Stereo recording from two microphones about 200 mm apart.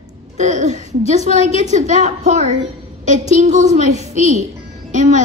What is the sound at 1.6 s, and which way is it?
A woman's voice, 35° right (ahead or behind).